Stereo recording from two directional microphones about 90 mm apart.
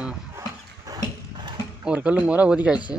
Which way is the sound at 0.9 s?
40° right (ahead or behind).